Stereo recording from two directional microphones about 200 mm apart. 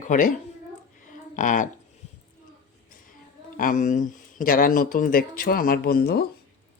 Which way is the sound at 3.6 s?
40° left (ahead or behind).